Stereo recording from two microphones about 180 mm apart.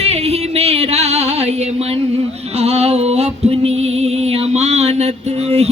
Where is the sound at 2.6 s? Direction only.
35° right (ahead or behind).